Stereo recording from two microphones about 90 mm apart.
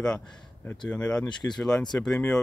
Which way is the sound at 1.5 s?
10° left (ahead or behind).